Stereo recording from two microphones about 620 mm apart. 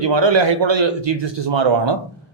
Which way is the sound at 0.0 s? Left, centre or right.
Right.